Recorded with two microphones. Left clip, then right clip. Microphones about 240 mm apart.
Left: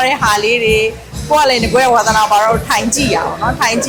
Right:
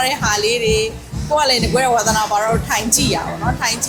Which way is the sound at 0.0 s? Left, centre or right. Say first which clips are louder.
Left 5 dB; centre.